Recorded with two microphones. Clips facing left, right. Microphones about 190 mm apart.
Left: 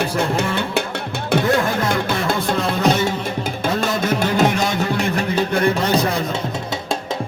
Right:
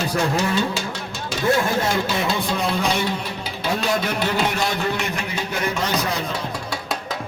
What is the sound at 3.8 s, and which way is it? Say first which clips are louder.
Music: left 2 dB; 45° left (ahead or behind).